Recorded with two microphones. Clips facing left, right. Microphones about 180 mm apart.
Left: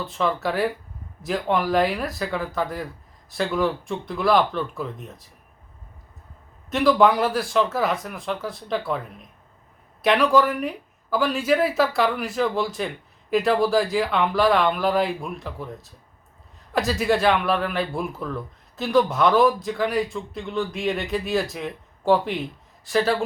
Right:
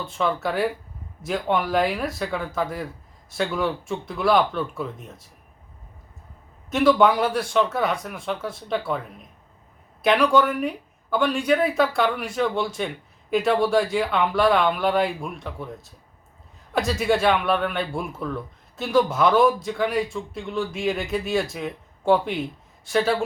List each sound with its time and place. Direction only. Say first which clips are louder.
0.0 s a man's voice: even; centre (ahead or behind)
6.7 s a man's voice: even; centre (ahead or behind)